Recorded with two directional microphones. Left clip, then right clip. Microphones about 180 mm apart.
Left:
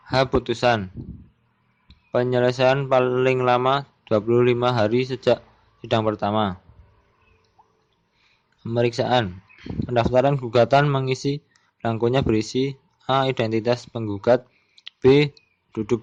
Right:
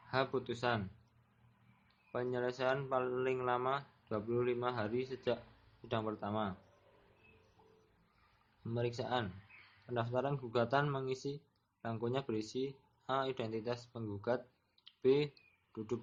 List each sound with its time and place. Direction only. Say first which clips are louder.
0.1 s speech: left 16 dB; 45° left (ahead or behind)
2.1 s speech: left 18 dB; 45° left (ahead or behind)
8.7 s speech: left 18 dB; 45° left (ahead or behind)